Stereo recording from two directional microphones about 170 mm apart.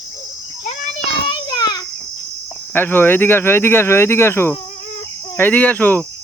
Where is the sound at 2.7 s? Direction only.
10° left (ahead or behind).